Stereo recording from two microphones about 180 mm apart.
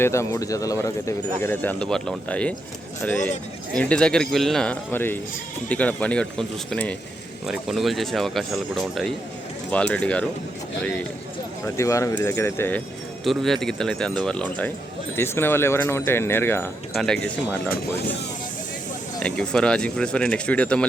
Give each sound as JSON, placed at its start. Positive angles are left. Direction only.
{"t": 0.0, "sound": "speech", "side_deg": 15}
{"t": 13.2, "sound": "speech", "side_deg": 0}
{"t": 19.2, "sound": "speech", "side_deg": 5}